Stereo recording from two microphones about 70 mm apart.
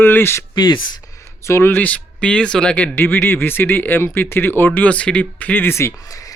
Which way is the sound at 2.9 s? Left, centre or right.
Left.